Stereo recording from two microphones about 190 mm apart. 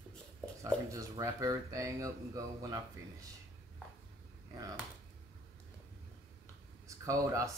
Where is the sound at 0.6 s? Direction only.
15° right (ahead or behind).